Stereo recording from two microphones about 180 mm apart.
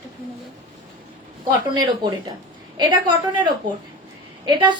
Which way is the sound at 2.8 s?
25° right (ahead or behind).